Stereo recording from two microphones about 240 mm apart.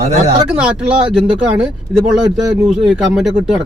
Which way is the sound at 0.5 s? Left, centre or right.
Centre.